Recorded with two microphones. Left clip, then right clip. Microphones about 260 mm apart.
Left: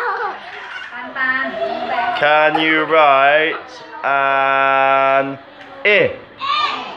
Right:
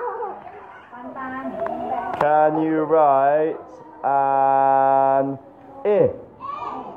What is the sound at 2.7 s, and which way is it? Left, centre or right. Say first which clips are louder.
Speech: left 5 dB; centre.